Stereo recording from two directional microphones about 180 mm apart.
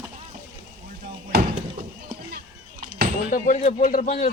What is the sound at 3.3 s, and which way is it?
A man's voice, 45° left (ahead or behind).